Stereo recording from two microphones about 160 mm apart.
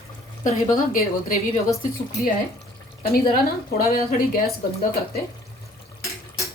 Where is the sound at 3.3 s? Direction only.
65° left (ahead or behind).